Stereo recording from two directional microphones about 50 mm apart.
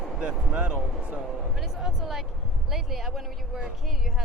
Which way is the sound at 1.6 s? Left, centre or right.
Centre.